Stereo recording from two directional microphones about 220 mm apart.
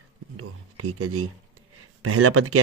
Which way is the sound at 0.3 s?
90° right.